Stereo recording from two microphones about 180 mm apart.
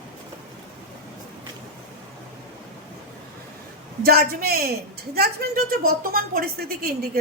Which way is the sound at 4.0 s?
60° right (ahead or behind).